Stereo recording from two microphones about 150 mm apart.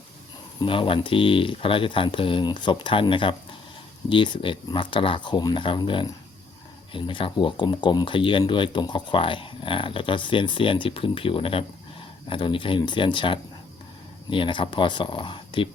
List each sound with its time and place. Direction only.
0.6 s speech: 35° left (ahead or behind)